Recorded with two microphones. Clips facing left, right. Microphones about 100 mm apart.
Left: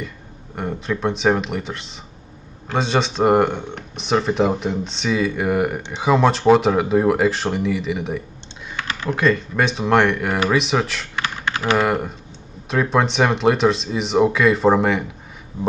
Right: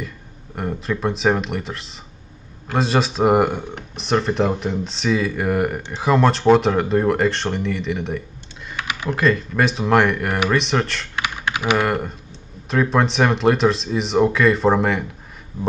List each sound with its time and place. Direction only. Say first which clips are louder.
0.6 s speech: even; centre (ahead or behind)
8.7 s typing: even; 15° right (ahead or behind)
9.1 s speech: even; centre (ahead or behind)
11.1 s typing: even; 15° right (ahead or behind)
11.9 s speech: left 1 dB; centre (ahead or behind)
15.6 s a sound: left 1 dB; 20° left (ahead or behind)